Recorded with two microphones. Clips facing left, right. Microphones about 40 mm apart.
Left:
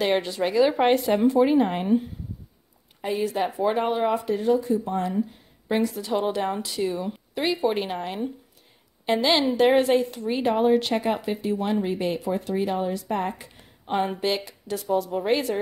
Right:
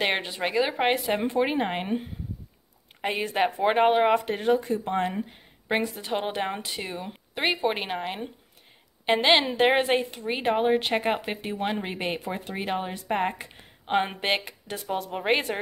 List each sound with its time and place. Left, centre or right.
0.0 s a woman's voice: right
0.6 s speech: centre
1.2 s a woman's voice: right
3.0 s speech: right
5.8 s a woman's voice: right
9.0 s speech: right
11.0 s speech: right